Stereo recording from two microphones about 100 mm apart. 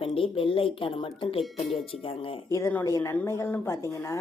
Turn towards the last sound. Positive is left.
turn(degrees=30)  # may be behind; listen again after turning